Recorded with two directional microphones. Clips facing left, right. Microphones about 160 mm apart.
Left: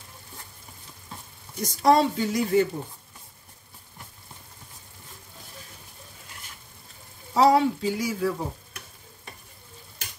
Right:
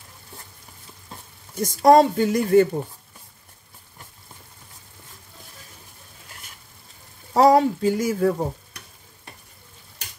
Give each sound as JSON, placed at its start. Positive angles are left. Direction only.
{"t": 1.6, "sound": "speech", "side_deg": -50}
{"t": 7.3, "sound": "speech", "side_deg": -45}